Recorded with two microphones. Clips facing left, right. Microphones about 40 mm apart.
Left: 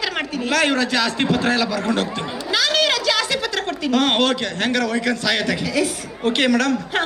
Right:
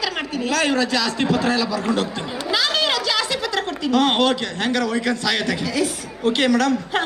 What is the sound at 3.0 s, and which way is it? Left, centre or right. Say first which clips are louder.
A woman's voice: left 2 dB; left.